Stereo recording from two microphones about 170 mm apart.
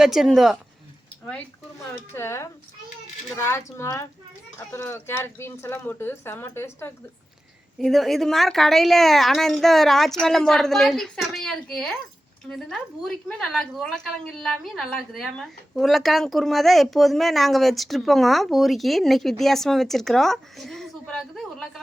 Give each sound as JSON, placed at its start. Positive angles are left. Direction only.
{"t": 0.0, "sound": "a woman's voice", "side_deg": 0}
{"t": 2.0, "sound": "speech", "side_deg": 15}
{"t": 7.8, "sound": "a woman's voice", "side_deg": 0}